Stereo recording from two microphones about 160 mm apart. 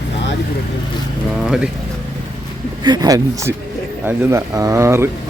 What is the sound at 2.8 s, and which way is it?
Speech, 25° right (ahead or behind).